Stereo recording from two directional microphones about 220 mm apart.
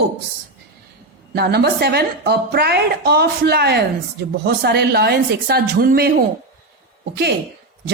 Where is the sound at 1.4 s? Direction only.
45° right (ahead or behind).